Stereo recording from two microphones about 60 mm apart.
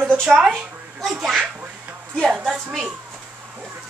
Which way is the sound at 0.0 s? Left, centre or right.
Centre.